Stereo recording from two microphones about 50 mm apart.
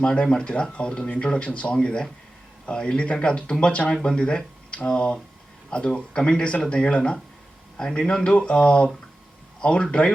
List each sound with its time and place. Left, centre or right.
0.0 s speech: centre